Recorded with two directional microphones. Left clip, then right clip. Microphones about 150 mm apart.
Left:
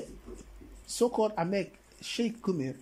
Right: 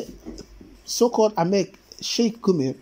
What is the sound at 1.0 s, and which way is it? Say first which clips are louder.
Speech: right 9 dB; 15° right (ahead or behind).